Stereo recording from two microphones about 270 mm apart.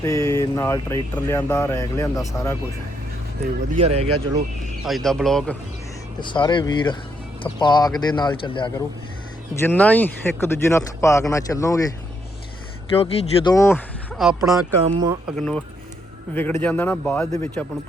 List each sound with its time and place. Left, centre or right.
0.0 s speech: centre
3.8 s speech: right
4.9 s a man's voice: centre
6.1 s speech: centre
9.6 s speech: centre
12.9 s speech: left; by 14.6 s centre
14.9 s speech: centre
15.3 s a man's voice: centre